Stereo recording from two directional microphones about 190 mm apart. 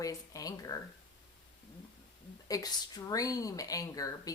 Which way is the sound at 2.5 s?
20° left (ahead or behind).